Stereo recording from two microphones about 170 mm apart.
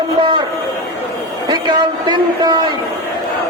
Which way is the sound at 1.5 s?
25° right (ahead or behind).